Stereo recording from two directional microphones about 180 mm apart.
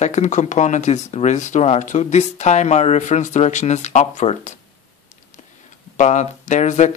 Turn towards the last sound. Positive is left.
turn(degrees=40)  # may be behind; listen again after turning